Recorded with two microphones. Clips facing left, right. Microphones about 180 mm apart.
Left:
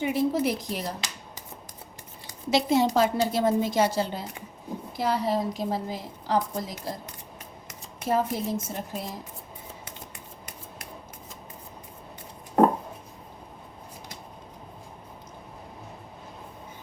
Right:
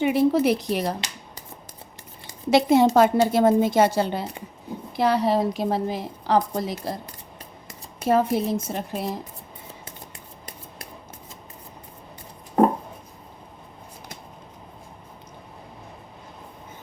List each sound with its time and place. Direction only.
0.0 s a woman's voice: 70° right (ahead or behind)
2.5 s a woman's voice: 55° right (ahead or behind)
8.0 s a woman's voice: 65° right (ahead or behind)